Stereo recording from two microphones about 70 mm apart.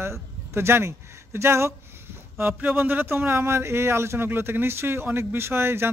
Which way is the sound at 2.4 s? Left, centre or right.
Right.